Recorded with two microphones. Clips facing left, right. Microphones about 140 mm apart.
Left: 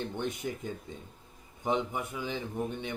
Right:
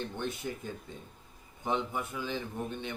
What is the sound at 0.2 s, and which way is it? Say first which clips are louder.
Speech: left 2 dB; 15° left (ahead or behind).